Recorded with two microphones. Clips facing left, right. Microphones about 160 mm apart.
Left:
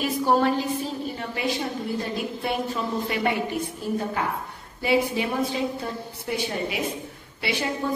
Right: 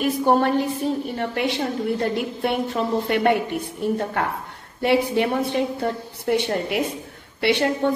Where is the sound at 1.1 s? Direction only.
65° right (ahead or behind).